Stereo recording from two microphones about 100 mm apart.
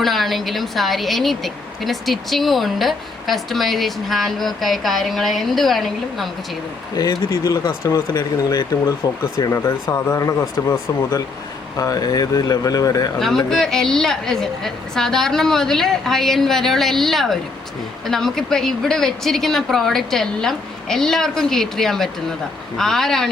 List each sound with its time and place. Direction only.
0.0 s a woman's voice: centre (ahead or behind)
6.9 s speech: 40° left (ahead or behind)
9.4 s speech: 30° left (ahead or behind)
13.1 s a woman's voice: 5° left (ahead or behind)